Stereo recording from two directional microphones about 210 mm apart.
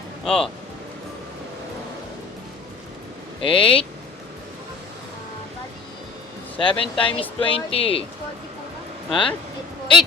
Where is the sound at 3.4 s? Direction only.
25° left (ahead or behind).